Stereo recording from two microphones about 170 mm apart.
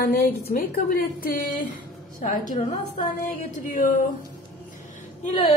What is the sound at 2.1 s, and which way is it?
A woman's voice, 50° left (ahead or behind).